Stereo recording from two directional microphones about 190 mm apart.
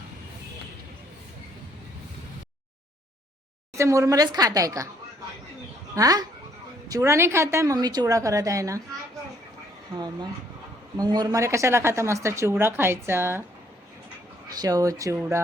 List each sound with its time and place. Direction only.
3.8 s a woman's voice: 15° right (ahead or behind)
5.9 s a woman's voice: 20° right (ahead or behind)
9.9 s a woman's voice: 20° right (ahead or behind)
14.5 s a woman's voice: 20° right (ahead or behind)